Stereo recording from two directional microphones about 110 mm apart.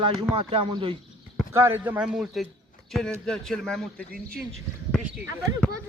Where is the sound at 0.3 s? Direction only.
55° right (ahead or behind).